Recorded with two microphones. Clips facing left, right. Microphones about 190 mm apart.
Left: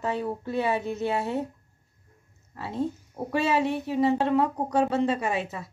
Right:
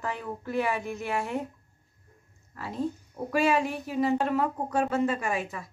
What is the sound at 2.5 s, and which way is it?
Speech, 25° left (ahead or behind).